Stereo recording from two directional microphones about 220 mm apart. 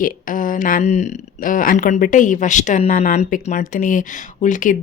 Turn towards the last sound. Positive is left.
turn(degrees=35)  # may be behind; listen again after turning